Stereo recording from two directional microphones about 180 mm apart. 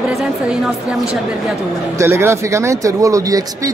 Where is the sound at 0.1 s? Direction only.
5° right (ahead or behind).